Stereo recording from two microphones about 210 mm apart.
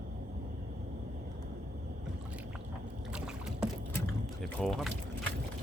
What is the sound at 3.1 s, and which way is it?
Boat, 5° right (ahead or behind).